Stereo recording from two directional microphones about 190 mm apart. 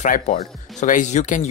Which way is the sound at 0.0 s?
40° left (ahead or behind).